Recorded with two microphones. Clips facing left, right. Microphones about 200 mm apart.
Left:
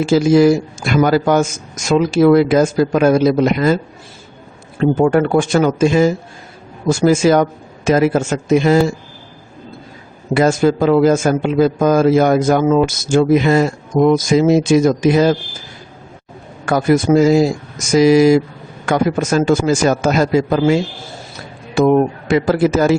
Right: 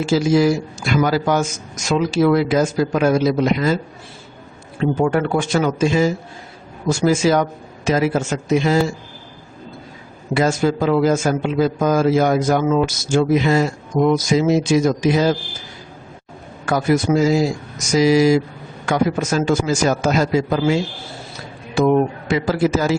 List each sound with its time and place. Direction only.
0.0 s a man's voice: 55° left (ahead or behind)
4.8 s a man's voice: 50° left (ahead or behind)
10.3 s a man's voice: 50° left (ahead or behind)
16.6 s a man's voice: 55° left (ahead or behind)
21.8 s a man's voice: 55° left (ahead or behind)